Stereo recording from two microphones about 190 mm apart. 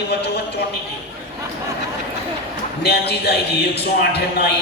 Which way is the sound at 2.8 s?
60° left (ahead or behind).